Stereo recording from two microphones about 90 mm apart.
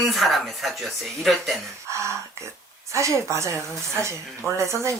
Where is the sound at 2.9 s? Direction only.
35° right (ahead or behind).